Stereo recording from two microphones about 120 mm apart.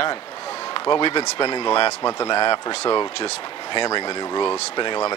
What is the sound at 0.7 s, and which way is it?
Speech, 40° left (ahead or behind).